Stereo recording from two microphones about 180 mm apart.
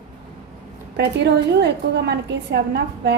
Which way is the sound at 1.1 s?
70° right (ahead or behind).